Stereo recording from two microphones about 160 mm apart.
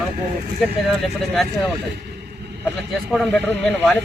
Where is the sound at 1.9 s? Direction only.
90° right.